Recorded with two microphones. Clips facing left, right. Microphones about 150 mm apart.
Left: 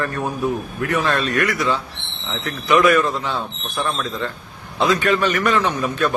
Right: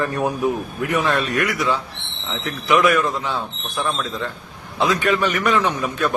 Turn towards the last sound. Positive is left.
turn(degrees=-10)  # may be behind; listen again after turning